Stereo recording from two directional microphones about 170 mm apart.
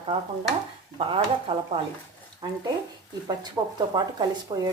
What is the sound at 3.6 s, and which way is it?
Speech, 20° right (ahead or behind).